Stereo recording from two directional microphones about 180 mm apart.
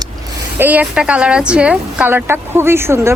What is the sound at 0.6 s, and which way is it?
A woman's voice, 10° right (ahead or behind).